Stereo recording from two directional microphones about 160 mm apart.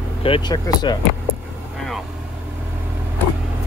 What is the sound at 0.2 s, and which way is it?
Speech, 30° left (ahead or behind).